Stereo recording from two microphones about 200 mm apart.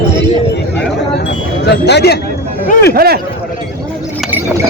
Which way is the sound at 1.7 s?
55° left (ahead or behind).